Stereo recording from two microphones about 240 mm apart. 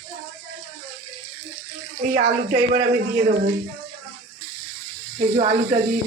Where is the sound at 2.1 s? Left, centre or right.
Right.